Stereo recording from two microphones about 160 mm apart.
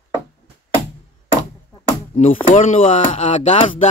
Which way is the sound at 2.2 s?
50° left (ahead or behind).